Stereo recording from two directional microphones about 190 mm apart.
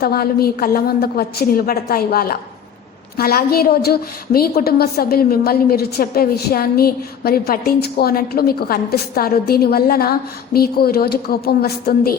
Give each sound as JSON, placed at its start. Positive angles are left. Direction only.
{"t": 0.0, "sound": "a woman's voice", "side_deg": 55}